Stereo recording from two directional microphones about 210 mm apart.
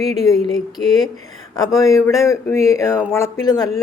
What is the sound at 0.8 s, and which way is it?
A woman's voice, 10° left (ahead or behind).